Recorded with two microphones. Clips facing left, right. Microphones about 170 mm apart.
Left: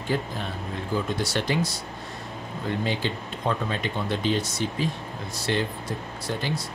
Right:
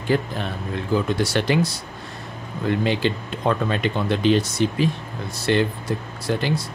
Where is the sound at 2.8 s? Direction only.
75° right (ahead or behind).